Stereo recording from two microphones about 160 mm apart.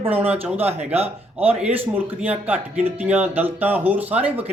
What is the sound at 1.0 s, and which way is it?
Speech, 40° right (ahead or behind).